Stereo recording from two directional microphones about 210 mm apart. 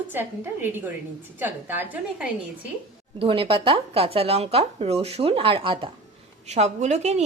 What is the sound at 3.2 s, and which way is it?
A woman's voice, 25° right (ahead or behind).